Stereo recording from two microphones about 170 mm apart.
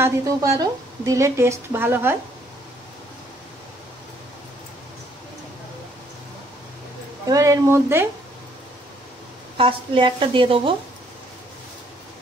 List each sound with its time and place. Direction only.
0.0 s a woman's voice: 20° right (ahead or behind)
7.2 s a woman's voice: 20° right (ahead or behind)
9.6 s a woman's voice: 30° right (ahead or behind)